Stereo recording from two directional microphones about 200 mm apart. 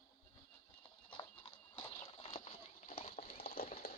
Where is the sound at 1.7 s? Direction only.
25° left (ahead or behind).